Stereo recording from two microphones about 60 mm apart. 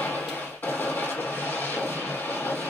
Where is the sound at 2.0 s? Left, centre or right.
Left.